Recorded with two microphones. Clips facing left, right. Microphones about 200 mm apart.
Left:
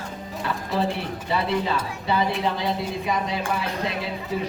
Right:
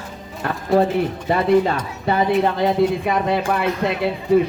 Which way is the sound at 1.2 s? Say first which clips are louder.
Right 7 dB; 50° right (ahead or behind).